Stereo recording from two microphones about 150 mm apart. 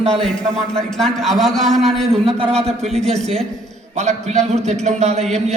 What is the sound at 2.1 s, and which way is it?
Speech, 40° right (ahead or behind).